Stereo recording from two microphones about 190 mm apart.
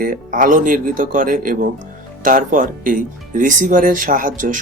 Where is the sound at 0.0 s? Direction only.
45° right (ahead or behind).